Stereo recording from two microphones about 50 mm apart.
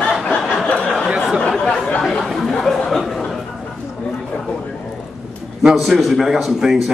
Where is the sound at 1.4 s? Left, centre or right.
Left.